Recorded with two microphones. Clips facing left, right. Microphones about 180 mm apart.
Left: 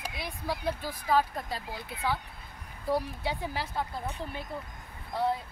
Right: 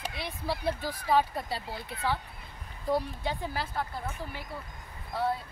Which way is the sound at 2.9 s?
10° left (ahead or behind).